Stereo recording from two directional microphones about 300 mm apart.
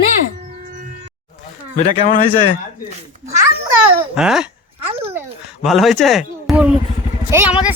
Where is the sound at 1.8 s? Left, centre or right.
Left.